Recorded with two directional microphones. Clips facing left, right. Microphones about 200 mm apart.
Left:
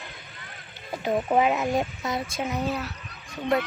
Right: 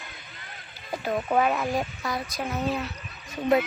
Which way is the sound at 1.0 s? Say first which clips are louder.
Left 2 dB; 15° left (ahead or behind).